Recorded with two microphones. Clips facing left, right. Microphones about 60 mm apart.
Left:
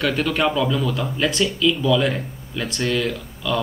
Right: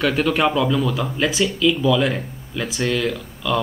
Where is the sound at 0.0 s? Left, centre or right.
Centre.